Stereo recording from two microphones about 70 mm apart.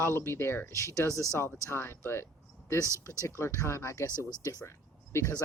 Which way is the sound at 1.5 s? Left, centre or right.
Left.